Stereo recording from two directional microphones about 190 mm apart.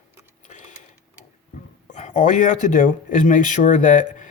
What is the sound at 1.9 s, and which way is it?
Speech, 40° left (ahead or behind).